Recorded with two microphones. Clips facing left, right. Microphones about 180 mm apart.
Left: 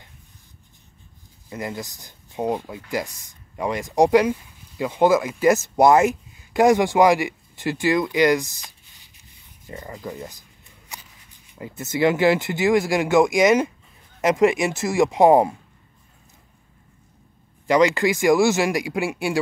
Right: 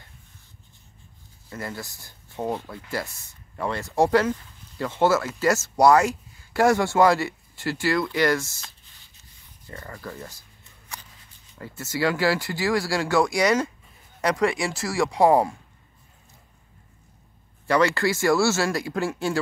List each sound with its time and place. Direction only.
1.5 s speech: 15° left (ahead or behind)
17.6 s speech: 15° left (ahead or behind)